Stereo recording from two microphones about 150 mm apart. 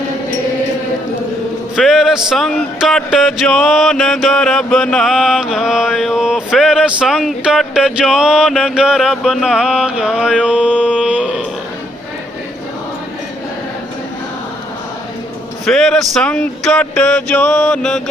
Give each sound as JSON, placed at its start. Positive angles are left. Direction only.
{"t": 1.7, "sound": "music", "side_deg": 0}
{"t": 15.6, "sound": "music", "side_deg": 0}